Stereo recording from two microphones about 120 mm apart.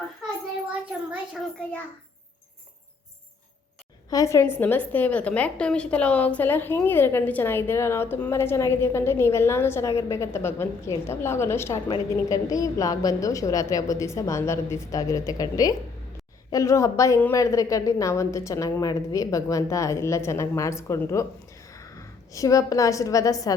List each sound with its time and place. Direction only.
0.7 s a child's voice: 10° right (ahead or behind)
4.1 s a woman's voice: 25° left (ahead or behind)